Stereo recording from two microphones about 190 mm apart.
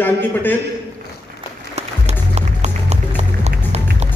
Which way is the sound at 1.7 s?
35° right (ahead or behind).